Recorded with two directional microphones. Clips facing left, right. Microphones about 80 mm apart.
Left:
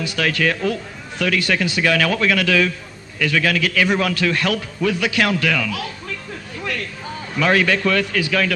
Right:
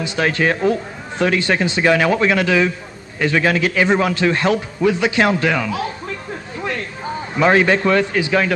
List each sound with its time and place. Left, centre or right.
0.0 s a man's voice: right